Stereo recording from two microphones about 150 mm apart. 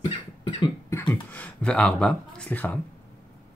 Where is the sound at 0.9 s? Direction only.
10° left (ahead or behind).